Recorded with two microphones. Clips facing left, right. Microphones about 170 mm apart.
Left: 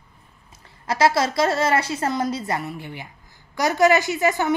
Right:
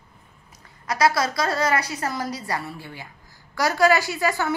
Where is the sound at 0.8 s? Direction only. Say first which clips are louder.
Left 2 dB; 25° left (ahead or behind).